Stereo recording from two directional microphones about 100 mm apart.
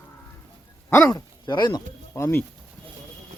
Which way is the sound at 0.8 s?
20° left (ahead or behind).